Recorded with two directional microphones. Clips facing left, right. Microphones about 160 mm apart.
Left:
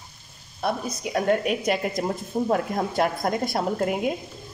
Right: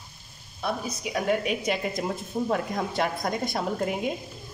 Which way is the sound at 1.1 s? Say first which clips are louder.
Left 3 dB; 55° left (ahead or behind).